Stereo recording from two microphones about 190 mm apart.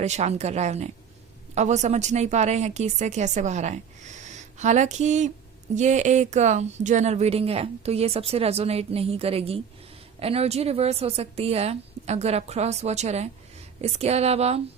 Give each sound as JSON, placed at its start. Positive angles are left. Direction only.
{"t": 0.0, "sound": "speech", "side_deg": -35}